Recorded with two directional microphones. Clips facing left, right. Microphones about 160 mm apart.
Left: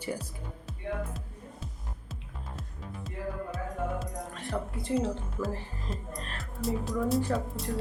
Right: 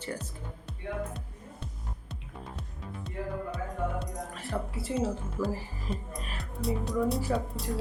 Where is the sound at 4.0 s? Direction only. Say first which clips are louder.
Even; centre (ahead or behind).